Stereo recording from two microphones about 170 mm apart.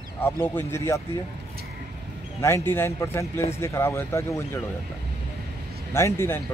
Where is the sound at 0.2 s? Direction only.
15° left (ahead or behind).